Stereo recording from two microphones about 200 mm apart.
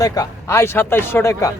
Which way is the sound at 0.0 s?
20° left (ahead or behind).